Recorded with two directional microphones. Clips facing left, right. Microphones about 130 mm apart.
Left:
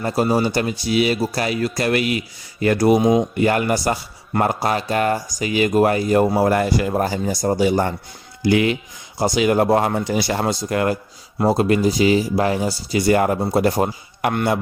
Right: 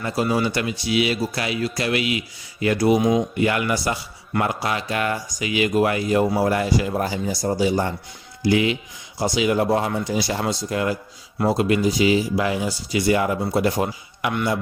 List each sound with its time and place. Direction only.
0.0 s speech: 40° left (ahead or behind); by 10.9 s 55° left (ahead or behind)
11.3 s speech: 40° left (ahead or behind); by 14.6 s 55° left (ahead or behind)